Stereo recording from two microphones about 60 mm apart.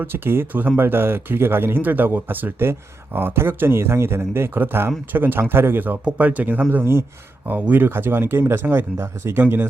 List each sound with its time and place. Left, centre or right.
0.0 s speech: right
9.0 s speech: right
9.4 s speech: right